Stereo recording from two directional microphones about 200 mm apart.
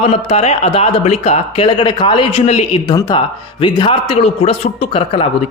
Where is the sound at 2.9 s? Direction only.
20° left (ahead or behind).